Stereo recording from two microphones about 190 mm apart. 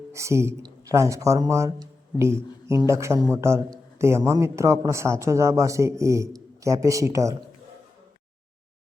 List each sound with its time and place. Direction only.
0.1 s speech: 15° right (ahead or behind)